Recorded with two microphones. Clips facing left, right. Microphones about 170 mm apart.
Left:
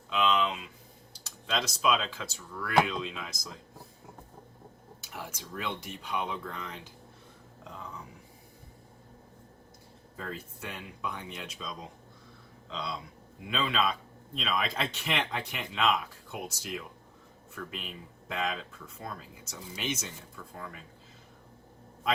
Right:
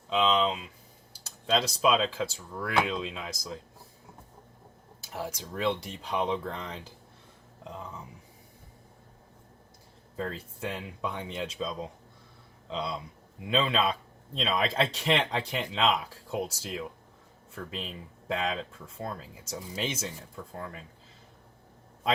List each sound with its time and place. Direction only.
0.1 s speech: 30° right (ahead or behind)
4.9 s speech: 35° right (ahead or behind)
10.2 s speech: 30° right (ahead or behind)
13.5 s speech: 30° right (ahead or behind)